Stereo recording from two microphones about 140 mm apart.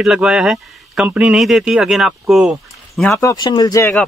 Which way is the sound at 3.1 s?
25° left (ahead or behind).